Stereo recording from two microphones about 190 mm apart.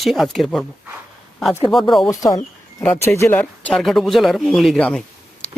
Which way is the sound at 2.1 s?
20° left (ahead or behind).